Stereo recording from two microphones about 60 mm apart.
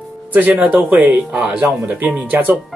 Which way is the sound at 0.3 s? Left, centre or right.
Right.